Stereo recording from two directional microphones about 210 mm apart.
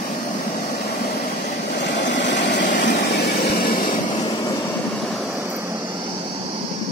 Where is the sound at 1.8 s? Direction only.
55° left (ahead or behind).